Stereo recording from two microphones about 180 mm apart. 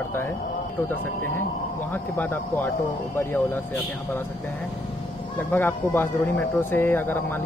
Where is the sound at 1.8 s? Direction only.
10° left (ahead or behind).